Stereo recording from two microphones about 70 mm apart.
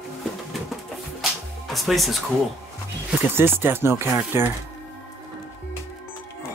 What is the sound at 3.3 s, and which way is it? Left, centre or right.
Speech, right.